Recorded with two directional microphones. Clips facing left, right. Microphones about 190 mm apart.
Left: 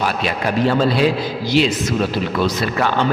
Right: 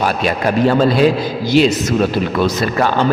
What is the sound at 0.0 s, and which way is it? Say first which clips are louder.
A man's voice: right 4 dB; 45° right (ahead or behind).